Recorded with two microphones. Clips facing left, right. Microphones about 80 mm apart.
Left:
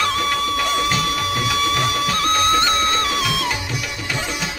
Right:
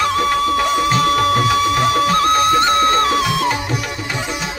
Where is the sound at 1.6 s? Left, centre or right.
Right.